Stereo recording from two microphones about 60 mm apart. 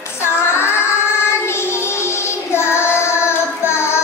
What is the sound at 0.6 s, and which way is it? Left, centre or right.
Music, left.